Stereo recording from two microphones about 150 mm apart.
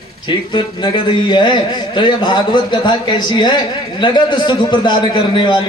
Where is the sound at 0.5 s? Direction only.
30° left (ahead or behind).